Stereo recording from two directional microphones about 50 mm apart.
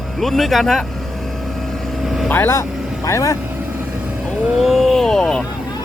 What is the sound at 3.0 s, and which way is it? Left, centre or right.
Speech, left.